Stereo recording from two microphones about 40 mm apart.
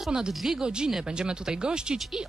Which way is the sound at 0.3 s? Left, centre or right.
Centre.